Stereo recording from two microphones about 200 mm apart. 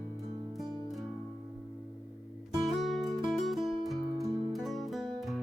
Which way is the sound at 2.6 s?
Centre (ahead or behind).